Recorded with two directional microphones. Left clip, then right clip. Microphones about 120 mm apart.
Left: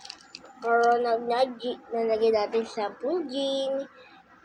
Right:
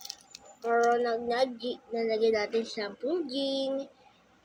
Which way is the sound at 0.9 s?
40° right (ahead or behind).